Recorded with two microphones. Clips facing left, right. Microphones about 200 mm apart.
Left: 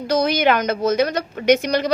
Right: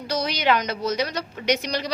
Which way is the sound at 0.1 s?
50° left (ahead or behind).